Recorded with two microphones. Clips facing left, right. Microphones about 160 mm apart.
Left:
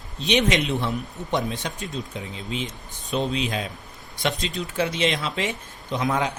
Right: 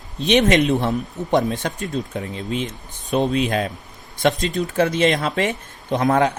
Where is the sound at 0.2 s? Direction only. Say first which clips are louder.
Right 6 dB; 50° right (ahead or behind).